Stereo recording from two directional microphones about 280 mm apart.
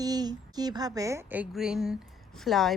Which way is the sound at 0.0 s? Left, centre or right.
Centre.